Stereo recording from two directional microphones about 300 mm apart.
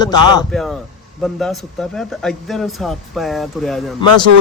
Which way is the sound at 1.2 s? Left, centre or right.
Centre.